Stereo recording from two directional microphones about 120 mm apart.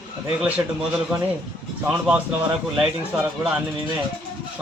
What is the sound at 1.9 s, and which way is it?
A man's voice, 10° right (ahead or behind).